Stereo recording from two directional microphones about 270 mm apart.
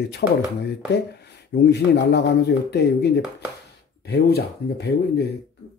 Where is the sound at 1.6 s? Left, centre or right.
Left.